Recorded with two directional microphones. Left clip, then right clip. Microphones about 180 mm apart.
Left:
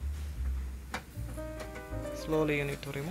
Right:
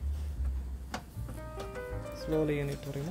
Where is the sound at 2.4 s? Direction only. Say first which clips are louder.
Left 2 dB; 15° right (ahead or behind).